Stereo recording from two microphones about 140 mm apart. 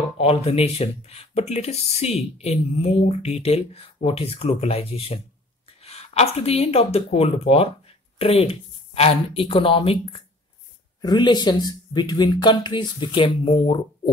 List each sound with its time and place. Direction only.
0.2 s speech: 45° left (ahead or behind)